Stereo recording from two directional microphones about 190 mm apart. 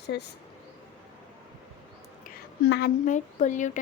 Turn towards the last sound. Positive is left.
turn(degrees=40)  # may be behind; listen again after turning